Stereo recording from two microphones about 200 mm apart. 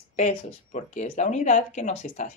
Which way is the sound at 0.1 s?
35° left (ahead or behind).